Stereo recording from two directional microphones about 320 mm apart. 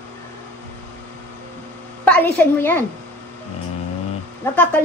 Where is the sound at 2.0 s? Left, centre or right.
Centre.